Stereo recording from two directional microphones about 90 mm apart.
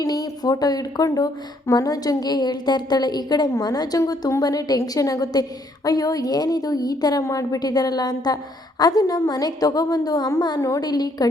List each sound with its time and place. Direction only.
0.0 s a woman's voice: 45° left (ahead or behind)